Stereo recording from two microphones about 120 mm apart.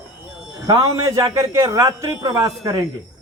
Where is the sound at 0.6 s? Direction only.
35° right (ahead or behind).